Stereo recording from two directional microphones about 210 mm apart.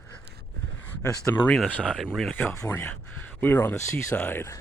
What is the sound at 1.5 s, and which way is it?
Speech, 5° left (ahead or behind).